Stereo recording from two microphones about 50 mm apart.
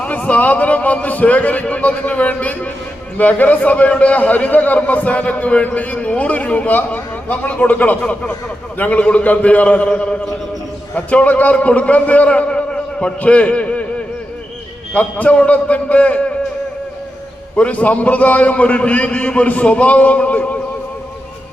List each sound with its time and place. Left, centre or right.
0.0 s a man's voice: left
14.9 s a man's voice: left
17.6 s a man's voice: left